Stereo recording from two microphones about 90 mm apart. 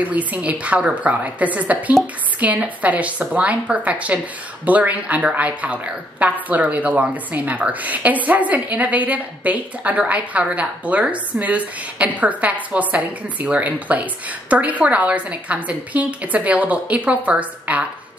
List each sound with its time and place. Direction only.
0.0 s a woman's voice: 15° right (ahead or behind)